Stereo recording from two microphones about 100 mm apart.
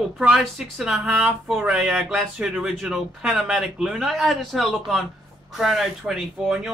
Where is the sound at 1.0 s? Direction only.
15° right (ahead or behind).